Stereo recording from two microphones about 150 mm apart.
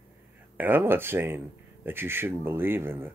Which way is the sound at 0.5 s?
15° right (ahead or behind).